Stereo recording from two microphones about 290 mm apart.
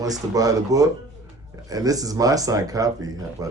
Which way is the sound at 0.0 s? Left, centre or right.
Centre.